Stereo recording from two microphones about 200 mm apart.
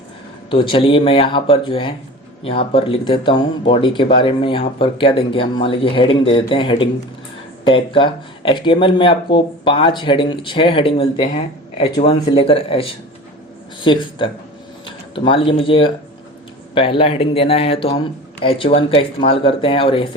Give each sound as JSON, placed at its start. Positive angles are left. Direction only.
{"t": 0.5, "sound": "speech", "side_deg": 25}